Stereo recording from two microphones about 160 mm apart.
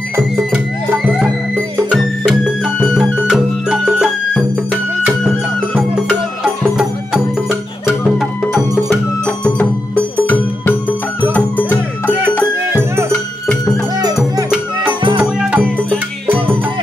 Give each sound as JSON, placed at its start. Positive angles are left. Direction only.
{"t": 0.1, "sound": "music", "side_deg": -5}
{"t": 1.8, "sound": "music", "side_deg": -5}
{"t": 7.4, "sound": "music", "side_deg": 0}
{"t": 10.1, "sound": "music", "side_deg": 10}
{"t": 12.6, "sound": "music", "side_deg": -15}
{"t": 14.9, "sound": "music", "side_deg": -30}
{"t": 15.1, "sound": "music", "side_deg": -10}